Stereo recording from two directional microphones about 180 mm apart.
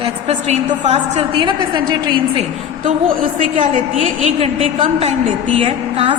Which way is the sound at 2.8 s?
45° right (ahead or behind).